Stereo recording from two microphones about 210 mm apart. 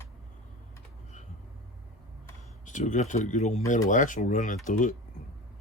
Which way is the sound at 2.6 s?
35° left (ahead or behind).